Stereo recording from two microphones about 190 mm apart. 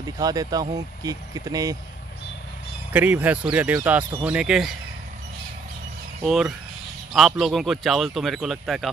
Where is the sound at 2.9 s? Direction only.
10° right (ahead or behind).